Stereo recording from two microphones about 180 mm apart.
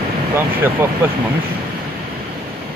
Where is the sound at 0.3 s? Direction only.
15° right (ahead or behind).